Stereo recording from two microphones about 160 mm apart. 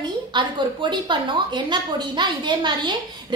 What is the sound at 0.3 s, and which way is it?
A woman's voice, 30° right (ahead or behind).